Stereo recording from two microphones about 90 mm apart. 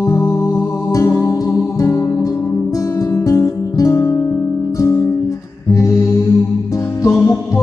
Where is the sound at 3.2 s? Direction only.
35° left (ahead or behind).